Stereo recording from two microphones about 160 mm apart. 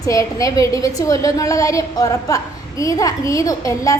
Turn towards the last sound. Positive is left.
turn(degrees=20)  # may be behind; listen again after turning